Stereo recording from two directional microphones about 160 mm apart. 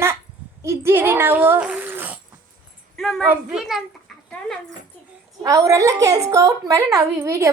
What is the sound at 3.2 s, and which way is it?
Speech, 10° right (ahead or behind).